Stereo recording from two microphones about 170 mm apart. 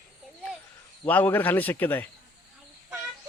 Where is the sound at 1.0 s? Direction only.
10° left (ahead or behind).